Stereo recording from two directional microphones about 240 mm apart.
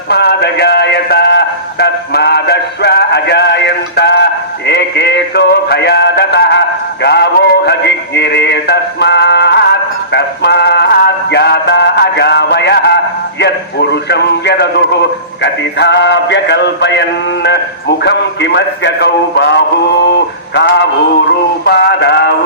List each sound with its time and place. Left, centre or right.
0.1 s a sound: left
7.0 s music: left
13.4 s a man's voice: left
15.4 s music: left